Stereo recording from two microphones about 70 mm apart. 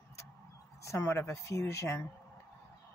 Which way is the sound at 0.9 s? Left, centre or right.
Left.